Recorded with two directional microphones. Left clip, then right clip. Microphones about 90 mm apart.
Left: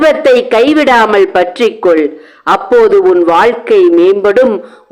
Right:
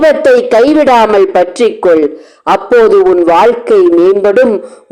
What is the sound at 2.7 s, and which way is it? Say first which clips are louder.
Speech: right 1 dB; 10° right (ahead or behind).